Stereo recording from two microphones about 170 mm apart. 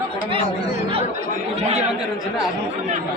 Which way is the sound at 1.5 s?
40° right (ahead or behind).